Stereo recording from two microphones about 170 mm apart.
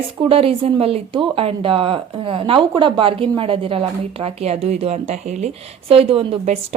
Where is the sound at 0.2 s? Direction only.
35° right (ahead or behind).